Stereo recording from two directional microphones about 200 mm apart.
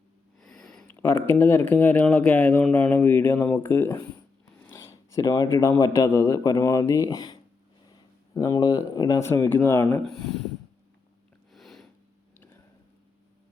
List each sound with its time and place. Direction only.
0.3 s speech: centre (ahead or behind)
10.1 s speech: centre (ahead or behind)
11.5 s a sound: centre (ahead or behind)